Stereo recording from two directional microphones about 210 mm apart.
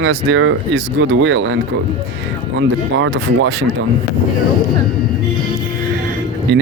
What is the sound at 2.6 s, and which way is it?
Speech, 60° right (ahead or behind).